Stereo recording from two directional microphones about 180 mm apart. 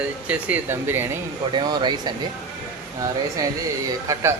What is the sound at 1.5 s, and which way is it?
Speech, 25° right (ahead or behind).